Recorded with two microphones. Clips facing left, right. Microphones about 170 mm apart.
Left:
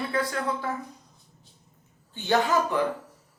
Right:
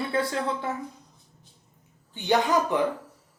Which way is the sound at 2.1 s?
15° right (ahead or behind).